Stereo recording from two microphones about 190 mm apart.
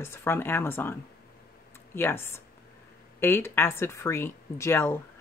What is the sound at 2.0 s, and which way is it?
Speech, 10° left (ahead or behind).